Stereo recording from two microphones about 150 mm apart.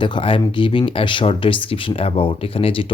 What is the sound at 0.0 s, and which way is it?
Speech, 35° left (ahead or behind).